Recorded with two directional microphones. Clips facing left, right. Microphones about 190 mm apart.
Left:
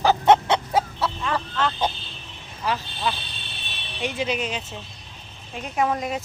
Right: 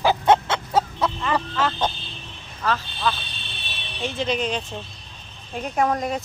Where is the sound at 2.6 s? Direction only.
15° left (ahead or behind).